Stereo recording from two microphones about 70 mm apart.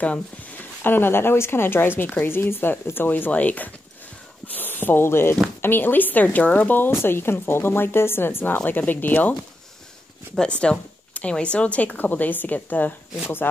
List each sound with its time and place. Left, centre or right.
0.8 s speech: left
10.4 s speech: centre